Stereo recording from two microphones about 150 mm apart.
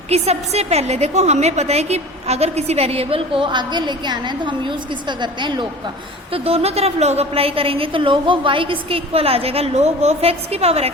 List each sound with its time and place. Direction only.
0.1 s a woman's voice: 45° right (ahead or behind)
6.3 s a woman's voice: 40° right (ahead or behind)